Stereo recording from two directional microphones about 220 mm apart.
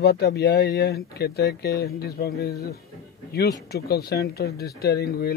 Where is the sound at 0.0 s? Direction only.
45° left (ahead or behind).